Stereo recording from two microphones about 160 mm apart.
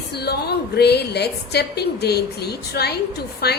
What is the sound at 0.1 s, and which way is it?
A woman's voice, 90° left.